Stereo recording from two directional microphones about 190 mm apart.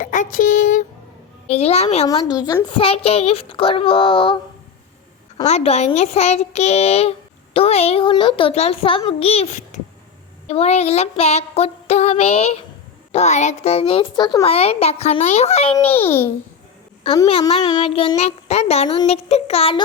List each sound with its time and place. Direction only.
0.0 s child singing: 45° left (ahead or behind)
1.5 s a child's voice: 35° left (ahead or behind)
2.3 s a child's voice: 20° left (ahead or behind)
5.5 s a child's voice: 35° left (ahead or behind)
15.9 s a child's voice: 10° left (ahead or behind)
17.0 s a child's voice: 30° left (ahead or behind)